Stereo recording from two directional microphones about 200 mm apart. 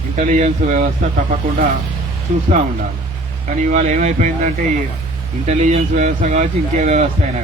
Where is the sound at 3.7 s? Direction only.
35° right (ahead or behind).